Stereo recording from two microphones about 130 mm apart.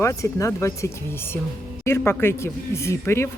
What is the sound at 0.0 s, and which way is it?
Speech, 25° left (ahead or behind).